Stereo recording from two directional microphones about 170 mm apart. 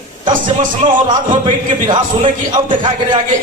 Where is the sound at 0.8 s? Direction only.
25° right (ahead or behind).